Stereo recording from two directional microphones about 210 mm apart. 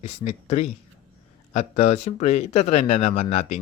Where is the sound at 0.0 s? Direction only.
30° left (ahead or behind).